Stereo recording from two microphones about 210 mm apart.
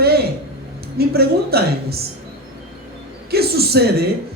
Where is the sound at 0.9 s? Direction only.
50° right (ahead or behind).